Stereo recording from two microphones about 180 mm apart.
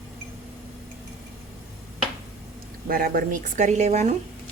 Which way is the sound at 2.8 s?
55° right (ahead or behind).